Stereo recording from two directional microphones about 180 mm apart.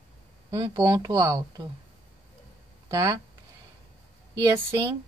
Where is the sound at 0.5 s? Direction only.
20° right (ahead or behind).